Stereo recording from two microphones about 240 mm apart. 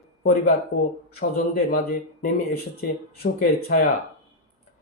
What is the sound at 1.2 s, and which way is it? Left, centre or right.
Speech, left.